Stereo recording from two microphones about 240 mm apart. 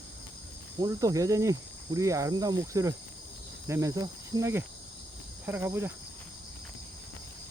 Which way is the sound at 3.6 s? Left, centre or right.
Centre.